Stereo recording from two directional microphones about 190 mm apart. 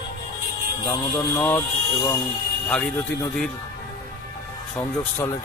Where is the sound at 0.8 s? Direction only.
20° left (ahead or behind).